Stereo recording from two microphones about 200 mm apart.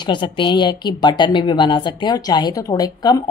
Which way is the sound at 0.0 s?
25° left (ahead or behind).